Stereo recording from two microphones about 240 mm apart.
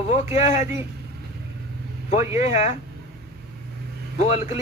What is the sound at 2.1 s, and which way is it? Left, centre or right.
Speech, left.